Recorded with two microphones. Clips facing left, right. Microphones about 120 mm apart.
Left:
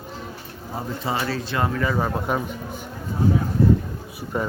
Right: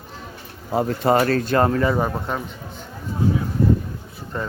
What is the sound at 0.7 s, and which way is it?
A man's voice, 75° right (ahead or behind).